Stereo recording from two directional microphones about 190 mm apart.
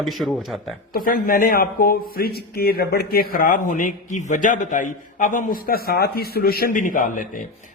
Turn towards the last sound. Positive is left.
turn(degrees=45)  # may be behind; listen again after turning